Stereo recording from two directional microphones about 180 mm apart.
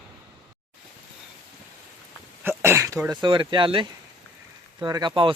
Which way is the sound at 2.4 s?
15° right (ahead or behind).